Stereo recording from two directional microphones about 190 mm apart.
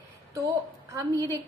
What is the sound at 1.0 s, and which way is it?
Speech, 20° right (ahead or behind).